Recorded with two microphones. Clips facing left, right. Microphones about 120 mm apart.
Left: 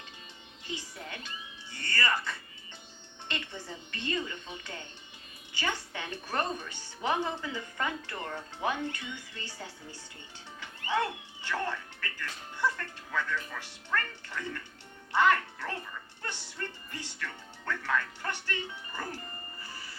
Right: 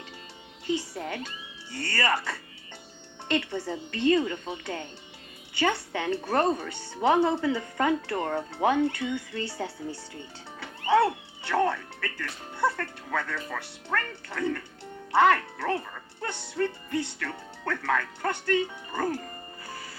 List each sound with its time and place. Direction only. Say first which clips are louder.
0.9 s a woman's voice: right 8 dB; 90° right
3.3 s a woman's voice: right 12 dB; 90° right; by 16.0 s 70° right (ahead or behind)
16.6 s speech: right 13 dB; 85° right